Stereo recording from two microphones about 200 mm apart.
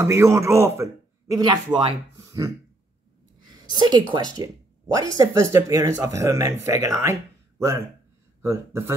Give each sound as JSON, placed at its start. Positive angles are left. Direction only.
{"t": 0.0, "sound": "a man's voice", "side_deg": -15}
{"t": 3.4, "sound": "a sound", "side_deg": -20}
{"t": 4.1, "sound": "speech", "side_deg": -20}